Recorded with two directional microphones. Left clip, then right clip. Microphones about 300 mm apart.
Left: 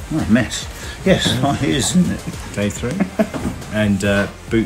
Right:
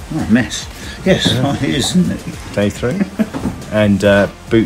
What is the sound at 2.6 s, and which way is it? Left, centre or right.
Speech, centre.